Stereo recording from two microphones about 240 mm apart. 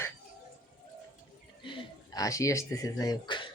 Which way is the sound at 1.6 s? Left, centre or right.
Centre.